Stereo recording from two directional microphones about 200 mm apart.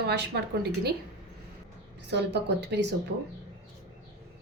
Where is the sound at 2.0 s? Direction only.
60° right (ahead or behind).